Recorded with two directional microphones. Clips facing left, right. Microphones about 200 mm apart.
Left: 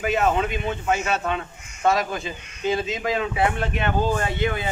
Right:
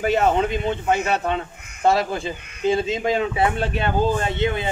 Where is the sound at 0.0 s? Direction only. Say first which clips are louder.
Right 3 dB; 30° right (ahead or behind).